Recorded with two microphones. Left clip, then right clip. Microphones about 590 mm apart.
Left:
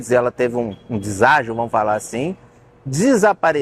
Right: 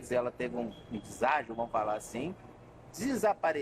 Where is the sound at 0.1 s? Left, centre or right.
Left.